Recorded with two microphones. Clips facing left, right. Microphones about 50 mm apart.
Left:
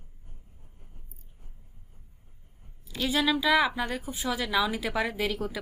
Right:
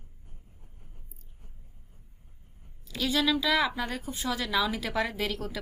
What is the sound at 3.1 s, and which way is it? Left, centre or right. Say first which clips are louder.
A woman's voice: left 2 dB; centre.